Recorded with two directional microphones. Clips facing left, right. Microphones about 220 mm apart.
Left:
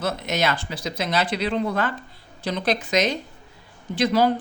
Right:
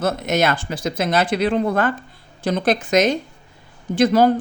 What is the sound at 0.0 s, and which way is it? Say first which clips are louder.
Speech: right 5 dB; 50° right (ahead or behind).